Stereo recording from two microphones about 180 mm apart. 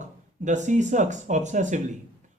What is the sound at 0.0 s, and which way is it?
Speech, 40° right (ahead or behind).